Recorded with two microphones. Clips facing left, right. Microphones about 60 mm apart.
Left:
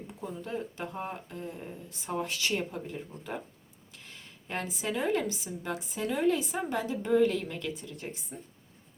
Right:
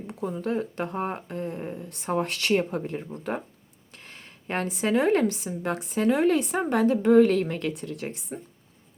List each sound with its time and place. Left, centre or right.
0.1 s speech: right